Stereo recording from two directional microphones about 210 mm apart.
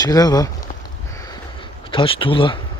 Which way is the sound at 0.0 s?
20° left (ahead or behind).